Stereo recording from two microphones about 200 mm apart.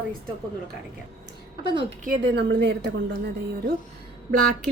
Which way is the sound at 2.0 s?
50° right (ahead or behind).